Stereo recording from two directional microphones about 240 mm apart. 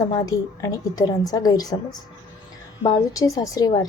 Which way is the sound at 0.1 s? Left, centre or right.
Centre.